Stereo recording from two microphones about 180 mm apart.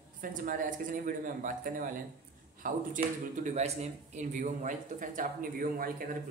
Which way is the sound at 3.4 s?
40° right (ahead or behind).